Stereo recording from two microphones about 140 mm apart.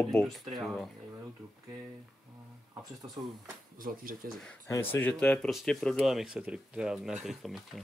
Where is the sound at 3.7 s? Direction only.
80° right.